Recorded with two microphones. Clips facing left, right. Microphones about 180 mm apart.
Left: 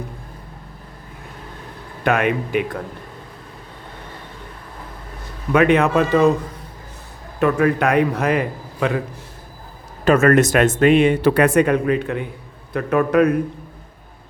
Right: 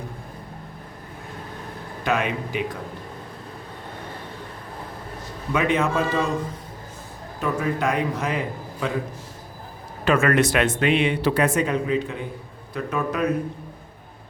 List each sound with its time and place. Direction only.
2.0 s a man's voice: 60° left (ahead or behind)
5.5 s a man's voice: 60° left (ahead or behind)
7.3 s a man's voice: 65° left (ahead or behind)
10.0 s a man's voice: 40° left (ahead or behind); by 13.3 s 60° left (ahead or behind)